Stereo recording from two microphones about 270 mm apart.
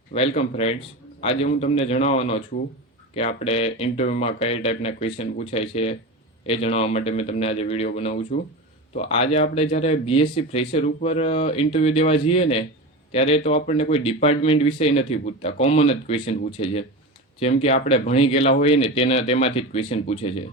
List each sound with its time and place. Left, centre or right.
0.1 s speech: left